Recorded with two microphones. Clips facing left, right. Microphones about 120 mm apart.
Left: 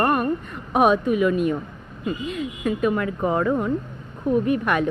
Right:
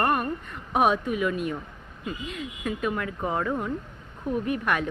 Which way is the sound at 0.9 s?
30° left (ahead or behind).